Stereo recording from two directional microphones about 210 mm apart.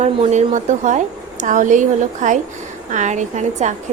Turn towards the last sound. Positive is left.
turn(degrees=-35)  # may be behind; listen again after turning